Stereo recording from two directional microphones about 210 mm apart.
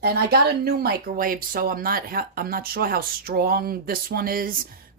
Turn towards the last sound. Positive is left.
turn(degrees=-45)  # may be behind; listen again after turning